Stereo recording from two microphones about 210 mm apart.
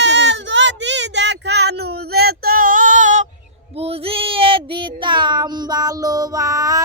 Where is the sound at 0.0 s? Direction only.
60° right (ahead or behind); by 3.2 s 35° right (ahead or behind).